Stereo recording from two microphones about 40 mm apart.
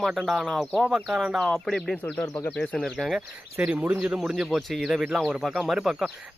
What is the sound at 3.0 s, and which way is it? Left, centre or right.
Speech, centre.